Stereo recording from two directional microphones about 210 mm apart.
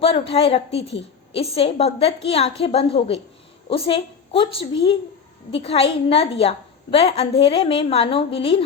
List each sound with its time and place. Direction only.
0.0 s a woman's voice: 25° left (ahead or behind)